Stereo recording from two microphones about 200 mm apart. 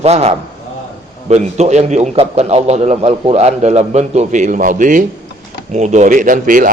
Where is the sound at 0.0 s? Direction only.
30° right (ahead or behind).